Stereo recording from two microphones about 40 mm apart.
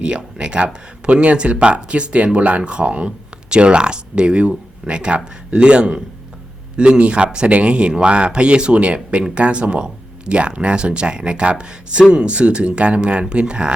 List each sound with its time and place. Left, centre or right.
0.0 s speech: right